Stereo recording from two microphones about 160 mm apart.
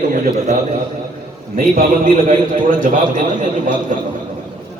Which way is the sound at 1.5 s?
60° right (ahead or behind).